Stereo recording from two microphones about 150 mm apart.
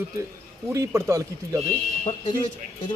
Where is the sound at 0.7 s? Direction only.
20° right (ahead or behind).